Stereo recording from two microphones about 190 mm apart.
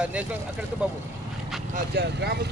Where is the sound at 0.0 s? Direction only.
5° right (ahead or behind).